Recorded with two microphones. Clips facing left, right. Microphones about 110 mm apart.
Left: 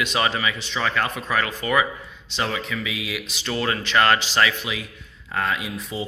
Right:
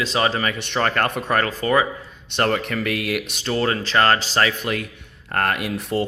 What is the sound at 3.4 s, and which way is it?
Speech, 35° right (ahead or behind).